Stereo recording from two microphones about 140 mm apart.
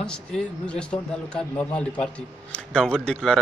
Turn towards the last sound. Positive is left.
turn(degrees=5)  # may be behind; listen again after turning